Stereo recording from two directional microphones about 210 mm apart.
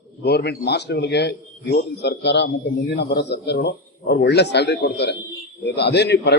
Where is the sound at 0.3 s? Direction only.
50° left (ahead or behind).